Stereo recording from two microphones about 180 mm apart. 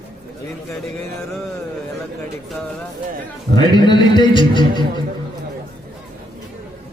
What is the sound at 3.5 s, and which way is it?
A man's voice, 25° left (ahead or behind).